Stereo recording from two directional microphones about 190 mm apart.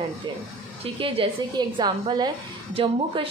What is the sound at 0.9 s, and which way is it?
Speech, 30° right (ahead or behind).